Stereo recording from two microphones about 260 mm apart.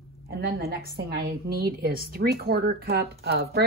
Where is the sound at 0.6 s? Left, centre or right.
Right.